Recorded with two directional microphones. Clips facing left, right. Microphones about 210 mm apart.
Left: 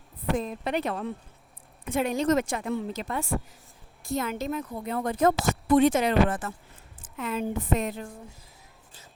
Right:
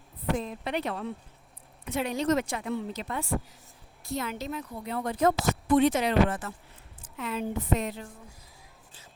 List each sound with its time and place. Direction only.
0.3 s a woman's voice: 45° left (ahead or behind)